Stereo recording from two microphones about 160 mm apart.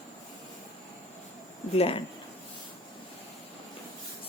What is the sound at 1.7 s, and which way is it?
Speech, 35° left (ahead or behind).